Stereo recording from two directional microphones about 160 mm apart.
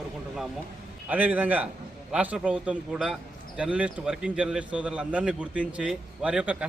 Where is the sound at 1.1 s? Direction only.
10° right (ahead or behind).